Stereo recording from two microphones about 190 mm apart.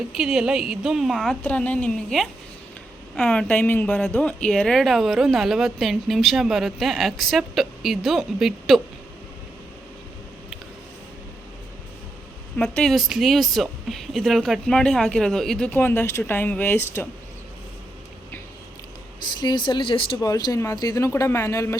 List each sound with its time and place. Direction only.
0.2 s a woman's voice: centre (ahead or behind)
12.5 s speech: 5° left (ahead or behind)
19.4 s speech: 25° left (ahead or behind)